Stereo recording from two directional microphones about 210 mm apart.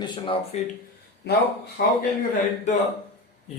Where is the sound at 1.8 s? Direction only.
45° left (ahead or behind).